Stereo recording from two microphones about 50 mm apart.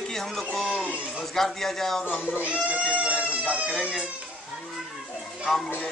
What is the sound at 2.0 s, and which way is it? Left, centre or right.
Speech, left.